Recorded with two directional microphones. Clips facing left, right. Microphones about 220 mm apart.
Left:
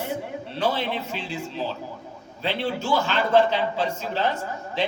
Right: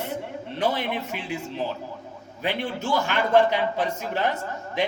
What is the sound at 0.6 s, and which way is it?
Speech, 15° right (ahead or behind).